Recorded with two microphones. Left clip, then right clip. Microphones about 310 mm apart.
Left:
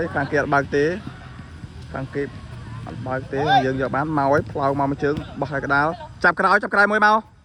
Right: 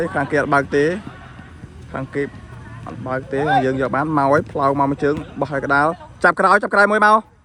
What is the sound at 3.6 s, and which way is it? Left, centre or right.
Speech, centre.